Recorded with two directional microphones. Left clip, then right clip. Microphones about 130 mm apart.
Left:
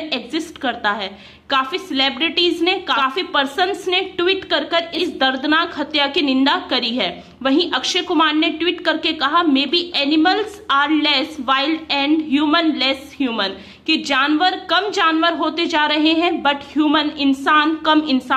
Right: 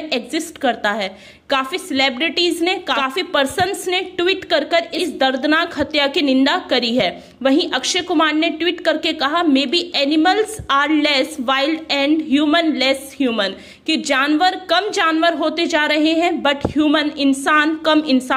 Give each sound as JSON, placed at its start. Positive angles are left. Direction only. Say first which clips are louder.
{"t": 0.1, "sound": "a woman's voice", "louder": "right 4 dB", "side_deg": -45}